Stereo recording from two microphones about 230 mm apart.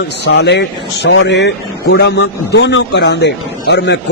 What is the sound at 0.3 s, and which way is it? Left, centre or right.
Speech, left.